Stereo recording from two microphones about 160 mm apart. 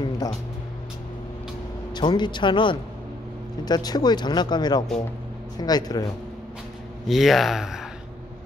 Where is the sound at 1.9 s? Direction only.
30° left (ahead or behind).